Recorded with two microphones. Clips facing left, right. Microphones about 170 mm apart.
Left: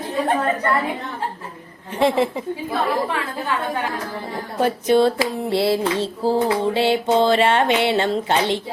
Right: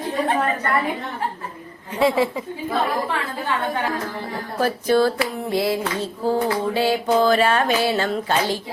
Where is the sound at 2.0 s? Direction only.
25° left (ahead or behind).